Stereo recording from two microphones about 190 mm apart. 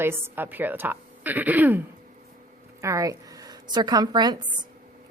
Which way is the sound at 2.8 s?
15° right (ahead or behind).